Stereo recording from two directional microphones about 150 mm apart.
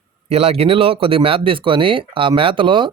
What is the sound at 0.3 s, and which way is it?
Speech, 40° right (ahead or behind).